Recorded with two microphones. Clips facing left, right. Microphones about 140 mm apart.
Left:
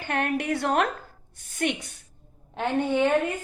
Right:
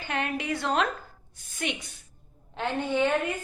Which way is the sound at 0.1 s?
55° left (ahead or behind).